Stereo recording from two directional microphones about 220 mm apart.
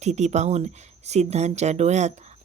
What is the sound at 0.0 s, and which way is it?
Speech, 30° right (ahead or behind).